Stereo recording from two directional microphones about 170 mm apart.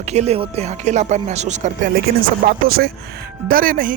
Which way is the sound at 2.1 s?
70° right (ahead or behind).